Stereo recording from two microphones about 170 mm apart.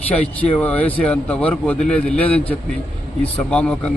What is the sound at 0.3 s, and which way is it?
A man's voice, 10° left (ahead or behind).